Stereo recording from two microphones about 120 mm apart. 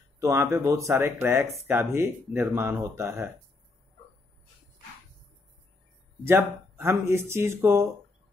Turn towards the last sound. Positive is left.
turn(degrees=-20)  # may be behind; listen again after turning